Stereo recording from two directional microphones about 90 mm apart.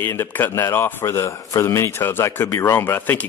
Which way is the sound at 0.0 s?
25° left (ahead or behind).